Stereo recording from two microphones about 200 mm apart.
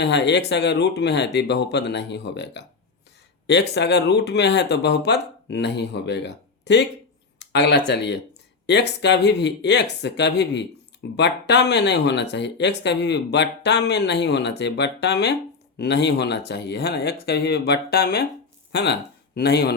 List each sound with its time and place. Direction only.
0.0 s speech: 60° left (ahead or behind)